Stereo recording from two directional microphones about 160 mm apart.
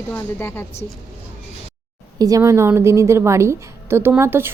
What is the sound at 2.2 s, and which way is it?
A woman's voice, 20° right (ahead or behind).